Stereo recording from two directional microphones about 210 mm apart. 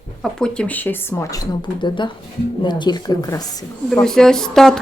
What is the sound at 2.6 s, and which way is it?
Speech, 20° left (ahead or behind).